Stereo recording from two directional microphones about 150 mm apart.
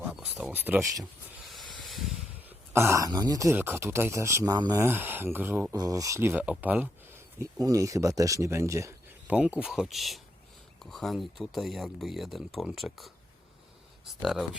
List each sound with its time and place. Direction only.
0.0 s speech: 10° right (ahead or behind)
1.5 s hiss: centre (ahead or behind)
2.5 s speech: 15° right (ahead or behind)
5.7 s speech: 25° right (ahead or behind); by 14.5 s centre (ahead or behind)